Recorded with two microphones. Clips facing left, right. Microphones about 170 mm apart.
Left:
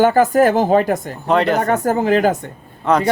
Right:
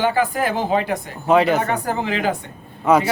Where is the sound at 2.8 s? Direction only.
5° right (ahead or behind).